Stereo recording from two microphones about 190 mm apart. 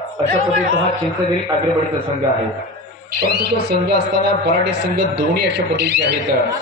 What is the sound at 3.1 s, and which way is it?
A man's voice, 55° right (ahead or behind).